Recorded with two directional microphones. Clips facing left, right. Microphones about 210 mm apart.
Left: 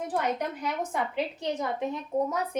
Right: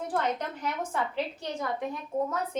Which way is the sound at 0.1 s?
15° left (ahead or behind).